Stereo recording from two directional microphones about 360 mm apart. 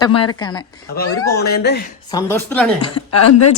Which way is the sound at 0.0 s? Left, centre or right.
Centre.